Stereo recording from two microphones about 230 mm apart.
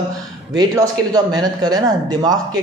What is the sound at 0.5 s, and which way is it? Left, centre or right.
Speech, centre.